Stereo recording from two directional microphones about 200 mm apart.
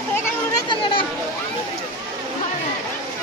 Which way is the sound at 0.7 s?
25° left (ahead or behind).